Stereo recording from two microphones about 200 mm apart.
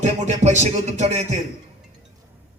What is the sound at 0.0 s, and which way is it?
Music, 35° right (ahead or behind).